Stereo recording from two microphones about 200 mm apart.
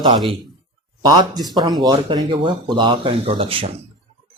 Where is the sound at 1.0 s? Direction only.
20° right (ahead or behind).